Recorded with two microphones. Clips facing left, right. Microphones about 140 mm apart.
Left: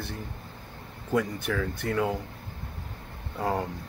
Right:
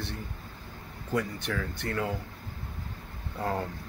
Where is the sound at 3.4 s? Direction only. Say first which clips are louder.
Left 3 dB; 15° left (ahead or behind).